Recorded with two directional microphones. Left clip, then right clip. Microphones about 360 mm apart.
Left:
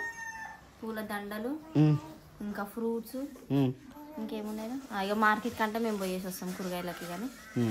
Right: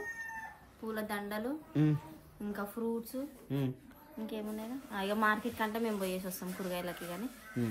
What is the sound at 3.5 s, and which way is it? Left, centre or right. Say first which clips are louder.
Speech: left 8 dB; centre.